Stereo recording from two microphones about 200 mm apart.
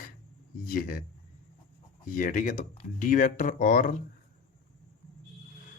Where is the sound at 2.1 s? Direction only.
40° left (ahead or behind).